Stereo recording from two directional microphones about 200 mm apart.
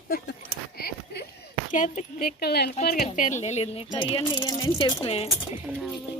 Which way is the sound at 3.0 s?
40° left (ahead or behind).